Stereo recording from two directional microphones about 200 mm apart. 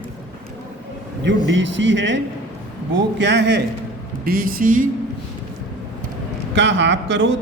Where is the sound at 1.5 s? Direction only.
65° right (ahead or behind).